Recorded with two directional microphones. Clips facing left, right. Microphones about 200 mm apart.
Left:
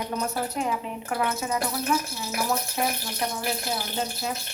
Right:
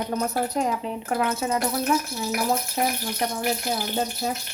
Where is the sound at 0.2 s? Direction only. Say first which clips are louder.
Right 4 dB; 40° right (ahead or behind).